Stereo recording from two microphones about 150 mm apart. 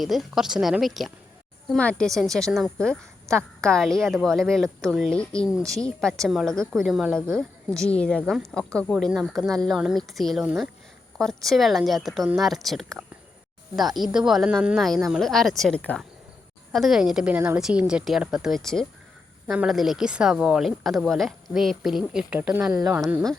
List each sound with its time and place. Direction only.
0.0 s a woman's voice: centre (ahead or behind)
11.2 s a woman's voice: centre (ahead or behind)
22.7 s speech: 20° right (ahead or behind)